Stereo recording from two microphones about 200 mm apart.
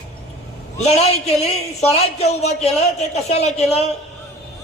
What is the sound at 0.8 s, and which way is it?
Speech, 35° left (ahead or behind).